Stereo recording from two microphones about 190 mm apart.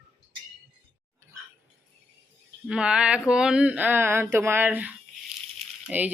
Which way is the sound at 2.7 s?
5° right (ahead or behind).